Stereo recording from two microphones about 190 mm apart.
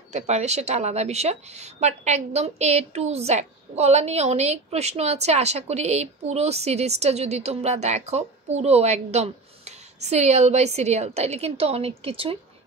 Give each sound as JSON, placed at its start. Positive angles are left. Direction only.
{"t": 0.1, "sound": "a woman's voice", "side_deg": -35}